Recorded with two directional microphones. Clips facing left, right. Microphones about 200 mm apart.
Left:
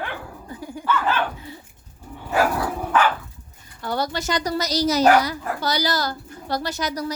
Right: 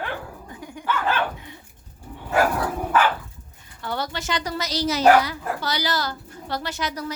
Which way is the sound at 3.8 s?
40° left (ahead or behind).